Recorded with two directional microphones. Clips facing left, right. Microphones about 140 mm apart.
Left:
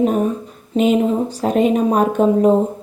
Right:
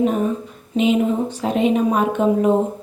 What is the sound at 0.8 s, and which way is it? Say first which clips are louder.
Speech: left 2 dB; 40° left (ahead or behind).